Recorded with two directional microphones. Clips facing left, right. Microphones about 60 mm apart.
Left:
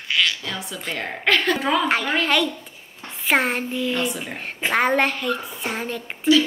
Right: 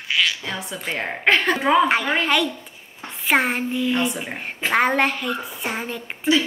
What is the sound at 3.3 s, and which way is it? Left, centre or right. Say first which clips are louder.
Child singing: right 1 dB; centre.